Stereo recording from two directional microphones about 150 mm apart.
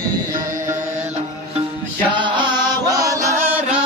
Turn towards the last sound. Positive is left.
turn(degrees=-15)  # may be behind; listen again after turning